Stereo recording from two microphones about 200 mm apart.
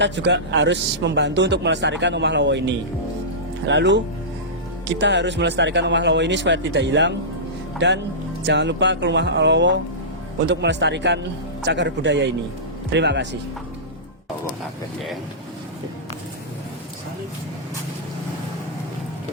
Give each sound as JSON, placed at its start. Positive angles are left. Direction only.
{"t": 0.0, "sound": "speech", "side_deg": -60}